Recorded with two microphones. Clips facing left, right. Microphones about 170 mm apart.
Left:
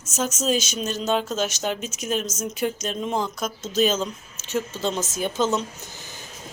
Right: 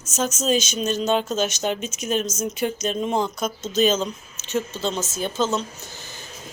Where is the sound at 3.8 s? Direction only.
5° left (ahead or behind).